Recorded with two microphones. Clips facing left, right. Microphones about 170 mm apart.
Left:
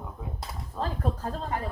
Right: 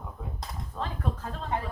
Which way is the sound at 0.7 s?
35° left (ahead or behind).